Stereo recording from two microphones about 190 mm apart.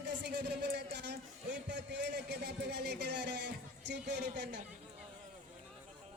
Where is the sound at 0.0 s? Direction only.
60° right (ahead or behind).